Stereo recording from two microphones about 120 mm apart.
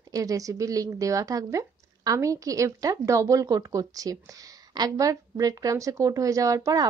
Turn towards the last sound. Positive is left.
turn(degrees=-25)  # may be behind; listen again after turning